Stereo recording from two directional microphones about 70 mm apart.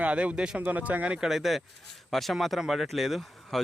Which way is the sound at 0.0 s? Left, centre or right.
Centre.